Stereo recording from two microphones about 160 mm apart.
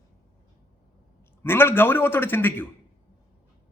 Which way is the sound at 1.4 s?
15° left (ahead or behind).